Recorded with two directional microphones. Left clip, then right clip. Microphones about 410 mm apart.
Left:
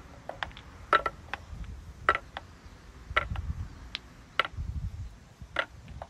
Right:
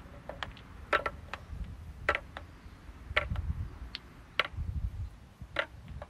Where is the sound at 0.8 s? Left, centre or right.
Centre.